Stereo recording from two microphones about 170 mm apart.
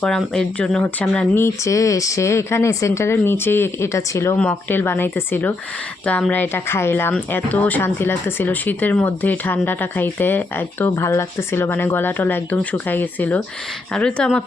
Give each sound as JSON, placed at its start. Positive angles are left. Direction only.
{"t": 0.0, "sound": "speech", "side_deg": 5}